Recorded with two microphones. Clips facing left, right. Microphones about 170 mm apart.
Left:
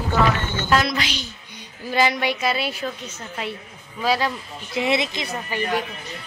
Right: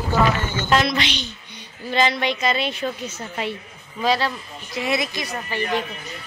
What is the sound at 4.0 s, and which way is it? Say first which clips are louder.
Speech: right 1 dB; 10° left (ahead or behind).